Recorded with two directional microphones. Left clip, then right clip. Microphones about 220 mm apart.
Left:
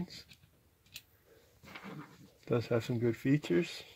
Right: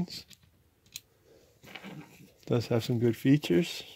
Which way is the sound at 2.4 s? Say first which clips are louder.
Right 3 dB; 35° right (ahead or behind).